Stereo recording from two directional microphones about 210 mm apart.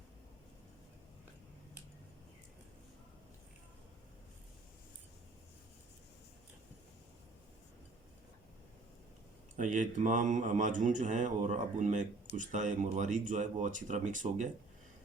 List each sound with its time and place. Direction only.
9.6 s speech: 35° right (ahead or behind)